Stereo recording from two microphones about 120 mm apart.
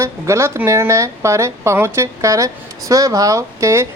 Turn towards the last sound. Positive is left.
turn(degrees=-25)  # may be behind; listen again after turning